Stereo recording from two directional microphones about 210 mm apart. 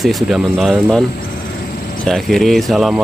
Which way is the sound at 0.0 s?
Centre (ahead or behind).